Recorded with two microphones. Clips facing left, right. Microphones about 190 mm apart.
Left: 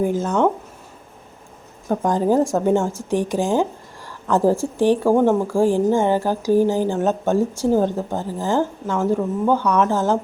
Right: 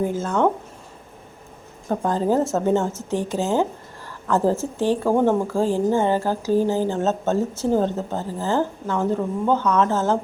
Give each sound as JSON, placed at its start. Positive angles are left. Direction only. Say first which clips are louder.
{"t": 0.0, "sound": "a woman's voice", "louder": "left 2 dB", "side_deg": 15}
{"t": 1.9, "sound": "a woman's voice", "louder": "left 2 dB", "side_deg": 10}